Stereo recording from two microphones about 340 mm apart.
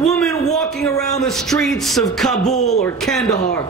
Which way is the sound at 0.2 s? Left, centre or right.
Centre.